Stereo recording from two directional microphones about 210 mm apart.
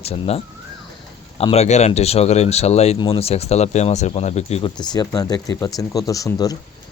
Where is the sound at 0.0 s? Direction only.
30° left (ahead or behind).